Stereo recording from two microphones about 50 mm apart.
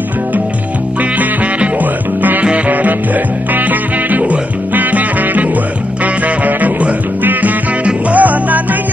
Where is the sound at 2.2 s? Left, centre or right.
Right.